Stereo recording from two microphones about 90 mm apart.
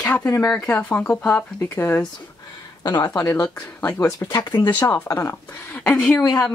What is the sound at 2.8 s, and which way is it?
Speech, 50° left (ahead or behind).